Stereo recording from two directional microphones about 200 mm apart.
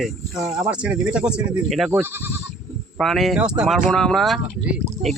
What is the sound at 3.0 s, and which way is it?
Speech, centre (ahead or behind).